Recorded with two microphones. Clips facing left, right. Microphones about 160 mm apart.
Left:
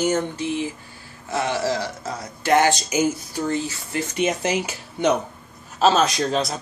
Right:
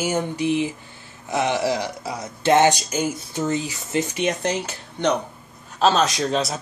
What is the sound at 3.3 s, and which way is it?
Speech, 20° right (ahead or behind).